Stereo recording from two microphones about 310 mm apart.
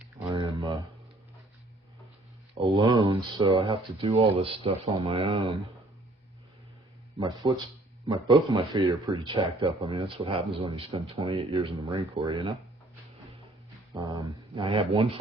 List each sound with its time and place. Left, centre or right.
0.0 s a sound: centre
2.6 s a man's voice: centre
7.2 s a man's voice: centre
13.9 s a man's voice: centre